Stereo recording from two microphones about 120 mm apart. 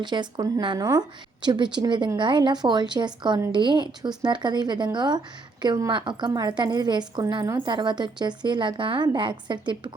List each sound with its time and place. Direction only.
0.0 s a woman's voice: 40° right (ahead or behind)